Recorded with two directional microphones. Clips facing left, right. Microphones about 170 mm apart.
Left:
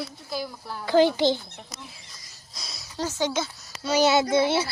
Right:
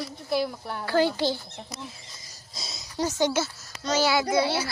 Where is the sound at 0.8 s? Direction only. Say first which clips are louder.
Left 4 dB; 15° left (ahead or behind).